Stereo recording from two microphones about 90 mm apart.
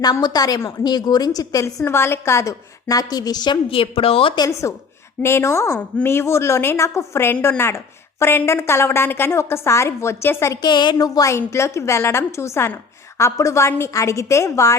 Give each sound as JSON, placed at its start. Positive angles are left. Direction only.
{"t": 0.0, "sound": "a woman's voice", "side_deg": 50}
{"t": 1.6, "sound": "a woman's voice", "side_deg": 30}
{"t": 3.7, "sound": "a woman's voice", "side_deg": 90}
{"t": 4.7, "sound": "a woman's voice", "side_deg": 35}
{"t": 10.6, "sound": "a woman's voice", "side_deg": 60}
{"t": 10.9, "sound": "a woman's voice", "side_deg": 40}